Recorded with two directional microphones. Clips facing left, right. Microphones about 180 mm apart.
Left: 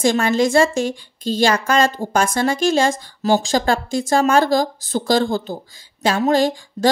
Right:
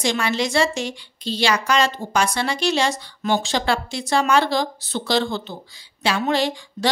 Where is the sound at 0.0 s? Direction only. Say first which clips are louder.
Left 6 dB; 45° left (ahead or behind).